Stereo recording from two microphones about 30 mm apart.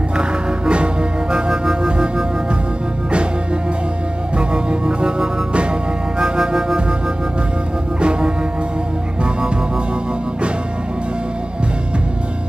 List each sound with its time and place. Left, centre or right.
0.2 s music: right
1.3 s music: right
4.4 s music: right
5.5 s music: right
8.0 s music: right